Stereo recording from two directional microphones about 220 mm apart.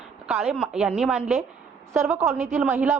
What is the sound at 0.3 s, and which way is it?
A woman's voice, centre (ahead or behind).